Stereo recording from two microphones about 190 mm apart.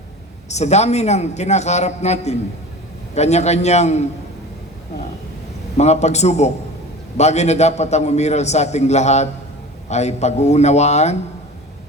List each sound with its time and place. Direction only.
0.4 s a man's voice: 35° left (ahead or behind)
5.7 s a man's voice: 35° left (ahead or behind)